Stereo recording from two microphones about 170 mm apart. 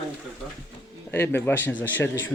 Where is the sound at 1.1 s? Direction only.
15° left (ahead or behind).